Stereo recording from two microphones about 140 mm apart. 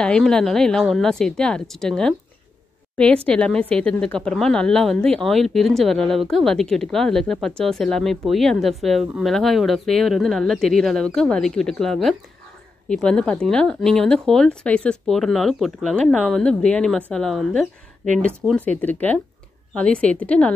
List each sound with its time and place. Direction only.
0.0 s a woman's voice: 5° left (ahead or behind)
3.3 s a woman's voice: 5° left (ahead or behind)
18.4 s speech: 15° right (ahead or behind)
18.8 s a woman's voice: 10° left (ahead or behind)